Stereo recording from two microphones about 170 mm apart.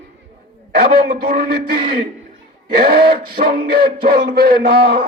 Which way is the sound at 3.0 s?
60° right (ahead or behind).